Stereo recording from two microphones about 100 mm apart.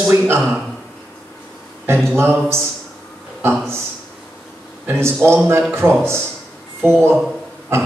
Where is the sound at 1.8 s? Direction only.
25° right (ahead or behind).